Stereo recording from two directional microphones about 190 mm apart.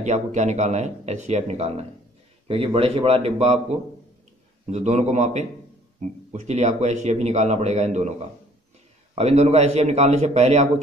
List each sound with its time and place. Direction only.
0.0 s speech: 40° right (ahead or behind)
4.6 s speech: 35° right (ahead or behind)